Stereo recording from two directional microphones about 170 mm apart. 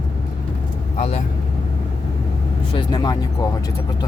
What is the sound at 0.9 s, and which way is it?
Speech, 40° left (ahead or behind).